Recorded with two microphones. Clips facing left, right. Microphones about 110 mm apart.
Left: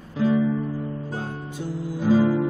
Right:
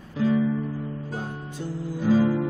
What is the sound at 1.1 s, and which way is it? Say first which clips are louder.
Music: left 2 dB; 15° left (ahead or behind).